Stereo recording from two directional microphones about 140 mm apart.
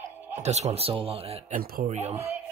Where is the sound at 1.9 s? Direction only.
45° right (ahead or behind).